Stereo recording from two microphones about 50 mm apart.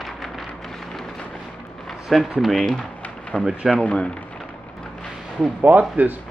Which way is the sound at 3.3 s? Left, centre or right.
Left.